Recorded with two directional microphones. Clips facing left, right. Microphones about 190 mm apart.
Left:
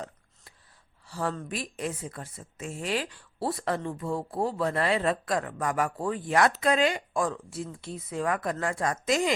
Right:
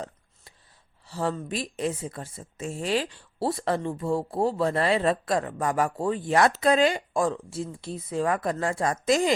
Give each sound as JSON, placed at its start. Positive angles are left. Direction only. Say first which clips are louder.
{"t": 1.0, "sound": "speech", "louder": "right 3 dB", "side_deg": -25}